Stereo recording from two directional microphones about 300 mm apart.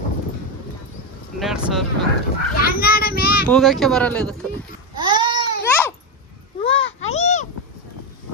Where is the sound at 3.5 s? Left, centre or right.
Centre.